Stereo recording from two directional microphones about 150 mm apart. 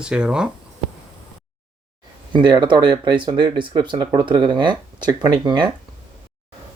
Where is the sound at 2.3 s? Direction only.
30° right (ahead or behind).